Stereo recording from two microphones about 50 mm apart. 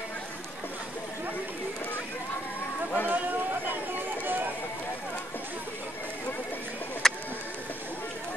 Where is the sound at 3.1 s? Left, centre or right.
Right.